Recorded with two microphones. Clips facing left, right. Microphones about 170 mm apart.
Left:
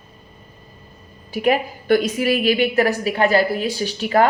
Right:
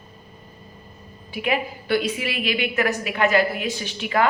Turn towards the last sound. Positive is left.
turn(degrees=40)  # may be behind; listen again after turning